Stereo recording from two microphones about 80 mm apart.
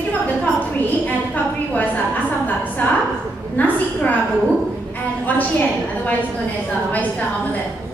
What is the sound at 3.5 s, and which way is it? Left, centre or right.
Speech, left.